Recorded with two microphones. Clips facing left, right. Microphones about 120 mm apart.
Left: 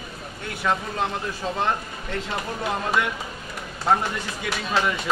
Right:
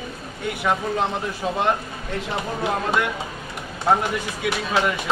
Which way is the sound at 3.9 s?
15° right (ahead or behind).